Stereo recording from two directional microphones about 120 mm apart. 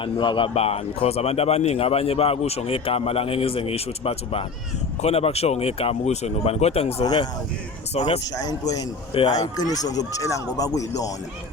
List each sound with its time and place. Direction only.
0.0 s speech: 40° left (ahead or behind); by 6.9 s 60° left (ahead or behind)
7.0 s speech: 35° left (ahead or behind)
7.9 s speech: 65° left (ahead or behind)
8.2 s speech: 30° left (ahead or behind)
9.1 s speech: 65° left (ahead or behind)
9.4 s speech: 30° left (ahead or behind)